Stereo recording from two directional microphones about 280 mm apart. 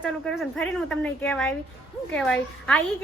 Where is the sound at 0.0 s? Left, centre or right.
Centre.